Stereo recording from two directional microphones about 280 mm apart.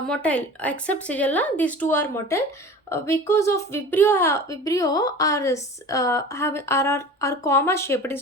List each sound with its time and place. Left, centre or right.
0.1 s a woman's voice: centre